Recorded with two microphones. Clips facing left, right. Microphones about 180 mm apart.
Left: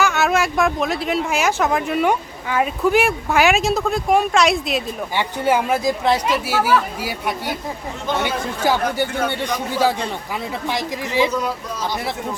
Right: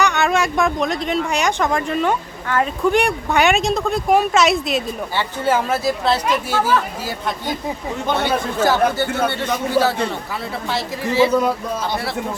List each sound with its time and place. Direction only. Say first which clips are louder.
0.0 s speech: even; centre (ahead or behind)
5.1 s speech: left 1 dB; 15° left (ahead or behind)
10.7 s speech: right 3 dB; 15° left (ahead or behind)